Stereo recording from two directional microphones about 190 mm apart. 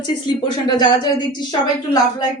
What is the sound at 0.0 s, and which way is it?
A woman's voice, 25° left (ahead or behind).